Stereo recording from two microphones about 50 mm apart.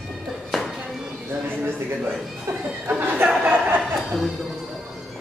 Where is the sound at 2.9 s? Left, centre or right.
Right.